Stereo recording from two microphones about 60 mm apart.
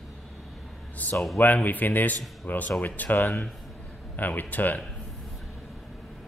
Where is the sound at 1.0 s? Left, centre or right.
Left.